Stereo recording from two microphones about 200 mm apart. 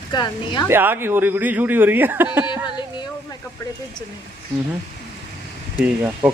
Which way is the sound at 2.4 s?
20° left (ahead or behind).